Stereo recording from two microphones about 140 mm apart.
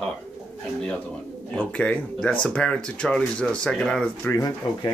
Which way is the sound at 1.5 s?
10° left (ahead or behind).